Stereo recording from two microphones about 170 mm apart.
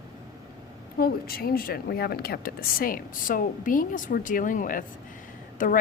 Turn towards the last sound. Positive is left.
turn(degrees=50)  # may be behind; listen again after turning